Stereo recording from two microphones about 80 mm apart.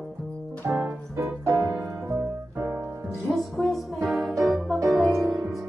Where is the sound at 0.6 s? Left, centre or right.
Right.